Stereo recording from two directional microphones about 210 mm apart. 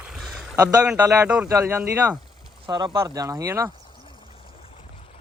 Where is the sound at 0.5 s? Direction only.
15° right (ahead or behind).